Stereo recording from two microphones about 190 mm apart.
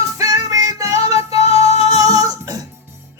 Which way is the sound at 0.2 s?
20° right (ahead or behind).